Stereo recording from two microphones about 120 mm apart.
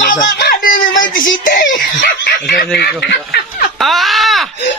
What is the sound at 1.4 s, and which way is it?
Speech, 90° left.